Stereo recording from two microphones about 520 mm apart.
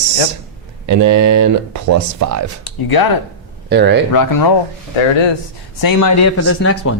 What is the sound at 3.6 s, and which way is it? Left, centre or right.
Speech, centre.